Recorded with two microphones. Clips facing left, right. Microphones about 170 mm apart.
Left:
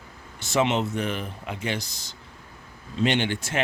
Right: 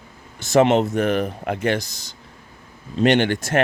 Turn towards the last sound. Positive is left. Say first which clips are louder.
# right 8 dB
turn(degrees=-50)  # may be behind; listen again after turning